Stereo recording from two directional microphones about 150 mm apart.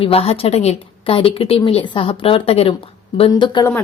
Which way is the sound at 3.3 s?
30° left (ahead or behind).